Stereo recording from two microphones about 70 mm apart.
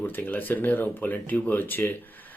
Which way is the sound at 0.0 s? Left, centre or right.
Left.